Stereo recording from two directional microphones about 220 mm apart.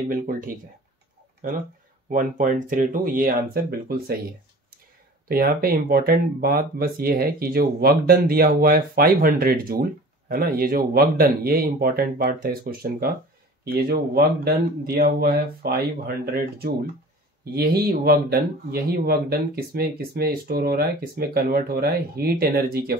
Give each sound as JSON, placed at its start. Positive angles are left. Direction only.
{"t": 2.0, "sound": "speech", "side_deg": -35}
{"t": 5.3, "sound": "speech", "side_deg": -40}